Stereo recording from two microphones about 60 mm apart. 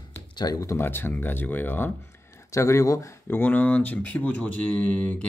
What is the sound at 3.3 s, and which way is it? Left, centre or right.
Speech, left.